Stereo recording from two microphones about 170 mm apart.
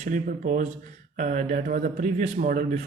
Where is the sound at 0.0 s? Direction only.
50° right (ahead or behind).